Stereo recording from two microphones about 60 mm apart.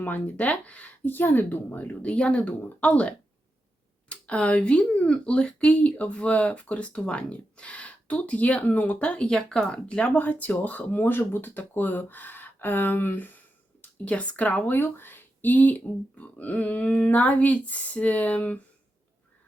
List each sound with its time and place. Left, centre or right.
0.0 s speech: left
10.2 s speech: left
14.0 s speech: left
14.8 s speech: left